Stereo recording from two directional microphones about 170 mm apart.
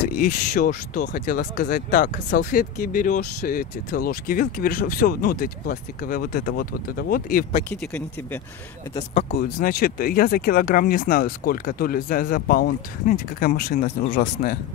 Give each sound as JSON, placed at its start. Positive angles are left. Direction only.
{"t": 0.1, "sound": "speech", "side_deg": 50}
{"t": 7.7, "sound": "speech", "side_deg": 5}
{"t": 8.9, "sound": "speech", "side_deg": 35}
{"t": 9.4, "sound": "speech", "side_deg": 60}